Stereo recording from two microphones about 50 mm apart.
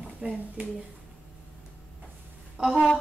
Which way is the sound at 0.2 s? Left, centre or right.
Right.